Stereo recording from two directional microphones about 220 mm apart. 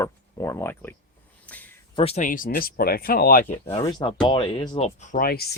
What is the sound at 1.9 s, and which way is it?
Speech, 25° left (ahead or behind).